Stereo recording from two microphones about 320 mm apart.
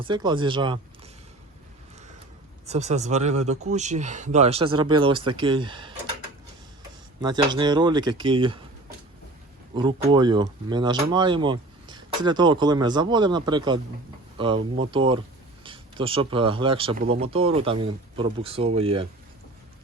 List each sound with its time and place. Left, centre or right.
0.0 s speech: centre
2.6 s speech: right
7.2 s speech: centre
9.7 s speech: centre